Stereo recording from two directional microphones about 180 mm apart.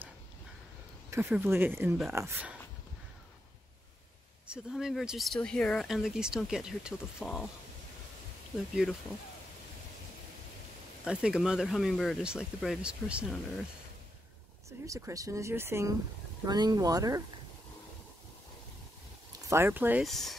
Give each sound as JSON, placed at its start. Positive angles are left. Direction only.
{"t": 1.1, "sound": "speech", "side_deg": -10}
{"t": 4.5, "sound": "speech", "side_deg": -5}
{"t": 11.1, "sound": "speech", "side_deg": -5}
{"t": 14.9, "sound": "speech", "side_deg": -15}
{"t": 19.5, "sound": "speech", "side_deg": -10}
{"t": 20.1, "sound": "speech", "side_deg": 0}